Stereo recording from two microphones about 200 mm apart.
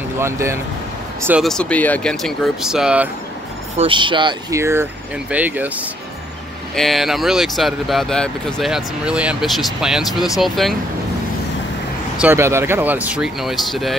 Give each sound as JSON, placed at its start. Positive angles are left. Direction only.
{"t": 0.2, "sound": "speech", "side_deg": -15}
{"t": 3.7, "sound": "speech", "side_deg": -25}
{"t": 12.2, "sound": "speech", "side_deg": -10}